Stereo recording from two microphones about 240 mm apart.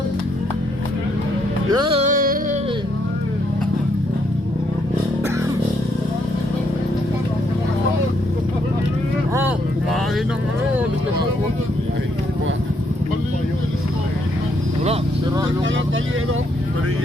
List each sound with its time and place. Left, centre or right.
1.7 s music: right